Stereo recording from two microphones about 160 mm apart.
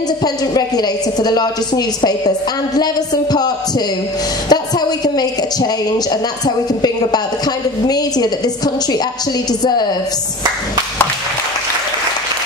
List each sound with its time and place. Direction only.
0.2 s a woman's voice: 25° left (ahead or behind)
4.5 s a sound: 25° left (ahead or behind)
6.4 s a woman's voice: 25° left (ahead or behind)
9.6 s a woman's voice: 25° left (ahead or behind)